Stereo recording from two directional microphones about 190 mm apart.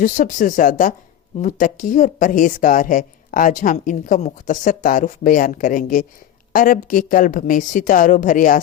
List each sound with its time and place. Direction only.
0.0 s a woman's voice: 45° left (ahead or behind)